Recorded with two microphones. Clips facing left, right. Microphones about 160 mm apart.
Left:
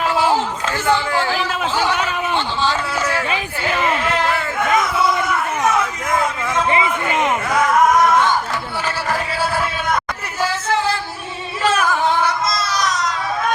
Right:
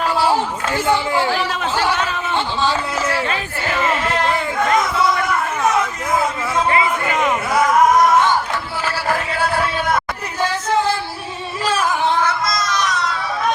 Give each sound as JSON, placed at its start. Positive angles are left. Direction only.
{"t": 0.9, "sound": "speech", "side_deg": -15}
{"t": 1.3, "sound": "a man's voice", "side_deg": 0}
{"t": 3.2, "sound": "speech", "side_deg": 10}
{"t": 6.1, "sound": "a man's voice", "side_deg": -5}
{"t": 6.7, "sound": "a man's voice", "side_deg": 20}
{"t": 12.5, "sound": "a sound", "side_deg": 35}